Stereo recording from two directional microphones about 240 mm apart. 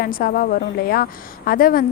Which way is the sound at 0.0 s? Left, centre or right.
Left.